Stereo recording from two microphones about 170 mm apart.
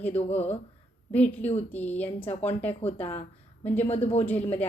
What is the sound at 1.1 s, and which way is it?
A woman's voice, 10° left (ahead or behind).